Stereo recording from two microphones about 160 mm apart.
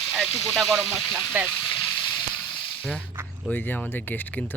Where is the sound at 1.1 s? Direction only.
10° right (ahead or behind).